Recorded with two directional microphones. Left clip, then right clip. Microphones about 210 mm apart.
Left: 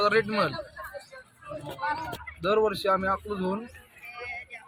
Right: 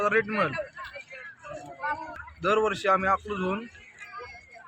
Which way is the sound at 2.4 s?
5° right (ahead or behind).